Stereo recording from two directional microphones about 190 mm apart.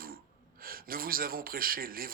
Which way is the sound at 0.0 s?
50° right (ahead or behind).